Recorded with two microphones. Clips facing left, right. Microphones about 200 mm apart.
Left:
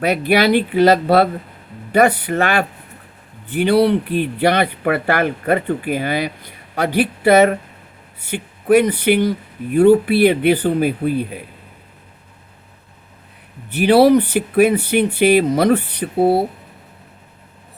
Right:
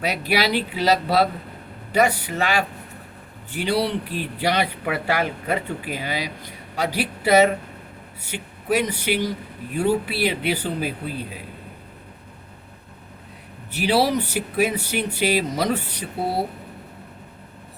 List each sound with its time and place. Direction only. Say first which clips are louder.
0.0 s speech: left 7 dB; 55° left (ahead or behind)
13.7 s speech: left 9 dB; 55° left (ahead or behind)